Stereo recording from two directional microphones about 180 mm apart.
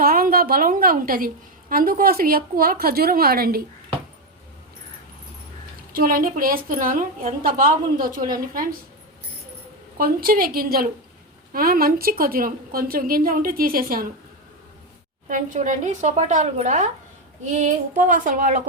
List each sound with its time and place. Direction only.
0.0 s a woman's voice: 55° right (ahead or behind)
5.9 s a woman's voice: 50° right (ahead or behind)
10.0 s a woman's voice: 55° right (ahead or behind)
15.3 s a woman's voice: 45° right (ahead or behind)